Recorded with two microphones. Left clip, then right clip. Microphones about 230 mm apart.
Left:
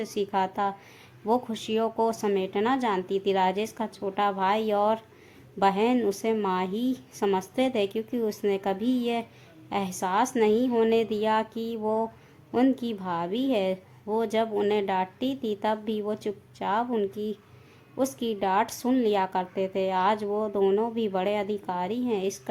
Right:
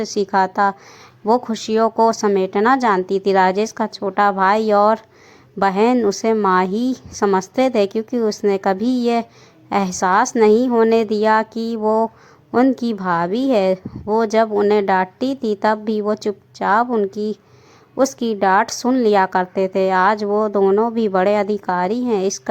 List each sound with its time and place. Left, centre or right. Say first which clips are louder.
0.0 s a woman's voice: right 10 dB; right